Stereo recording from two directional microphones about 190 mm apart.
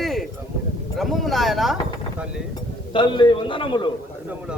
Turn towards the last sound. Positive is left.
turn(degrees=25)  # may be behind; listen again after turning